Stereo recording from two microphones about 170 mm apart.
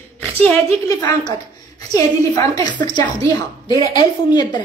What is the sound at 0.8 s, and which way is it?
A woman's voice, 20° left (ahead or behind).